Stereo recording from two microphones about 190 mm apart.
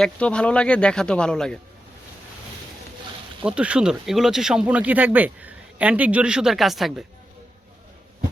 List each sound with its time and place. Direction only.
0.0 s speech: 5° left (ahead or behind)
3.4 s speech: 5° right (ahead or behind)